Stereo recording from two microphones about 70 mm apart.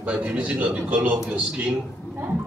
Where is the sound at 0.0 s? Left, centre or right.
Right.